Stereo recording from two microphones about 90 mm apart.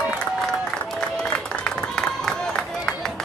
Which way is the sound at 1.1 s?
10° left (ahead or behind).